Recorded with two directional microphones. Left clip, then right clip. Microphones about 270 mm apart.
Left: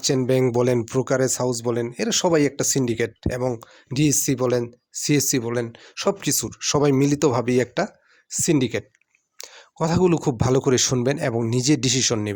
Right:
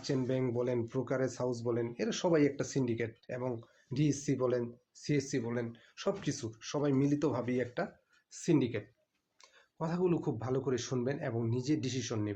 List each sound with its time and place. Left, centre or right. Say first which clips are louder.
0.0 s speech: left 14 dB; left